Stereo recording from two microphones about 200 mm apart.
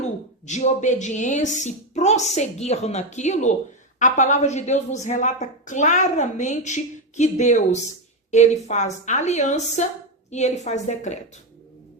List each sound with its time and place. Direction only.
0.4 s a woman's voice: 35° left (ahead or behind)